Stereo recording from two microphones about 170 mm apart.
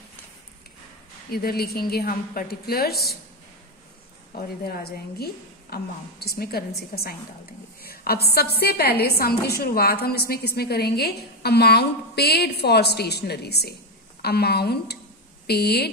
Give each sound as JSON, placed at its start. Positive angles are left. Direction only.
{"t": 1.3, "sound": "a woman's voice", "side_deg": 65}
{"t": 4.3, "sound": "a woman's voice", "side_deg": 65}